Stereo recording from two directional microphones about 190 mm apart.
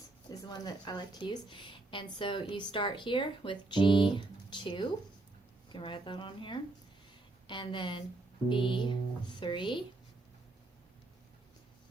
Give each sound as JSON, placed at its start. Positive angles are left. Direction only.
{"t": 0.3, "sound": "speech", "side_deg": 20}